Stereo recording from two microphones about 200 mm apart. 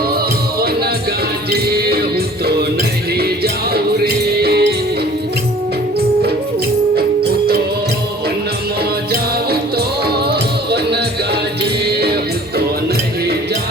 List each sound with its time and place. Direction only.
1.5 s music: 50° right (ahead or behind)
3.2 s music: 50° right (ahead or behind)
9.5 s music: 50° right (ahead or behind)